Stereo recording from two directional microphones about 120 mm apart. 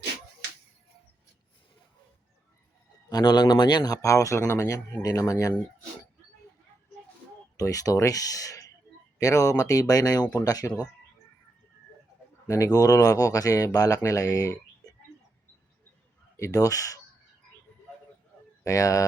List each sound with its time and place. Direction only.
3.1 s speech: 35° left (ahead or behind)
7.5 s speech: 30° left (ahead or behind)
12.5 s speech: 25° left (ahead or behind)
16.4 s speech: 30° left (ahead or behind)
18.6 s speech: 30° left (ahead or behind)